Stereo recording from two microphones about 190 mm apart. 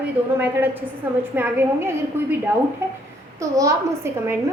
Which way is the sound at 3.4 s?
15° right (ahead or behind).